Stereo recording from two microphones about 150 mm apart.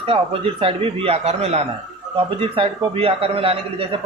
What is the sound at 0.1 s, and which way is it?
A man's voice, 40° right (ahead or behind).